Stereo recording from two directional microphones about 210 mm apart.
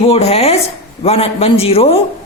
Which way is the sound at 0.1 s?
30° left (ahead or behind).